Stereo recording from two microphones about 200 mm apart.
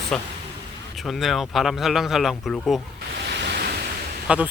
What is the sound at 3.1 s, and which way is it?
Waves, 55° right (ahead or behind).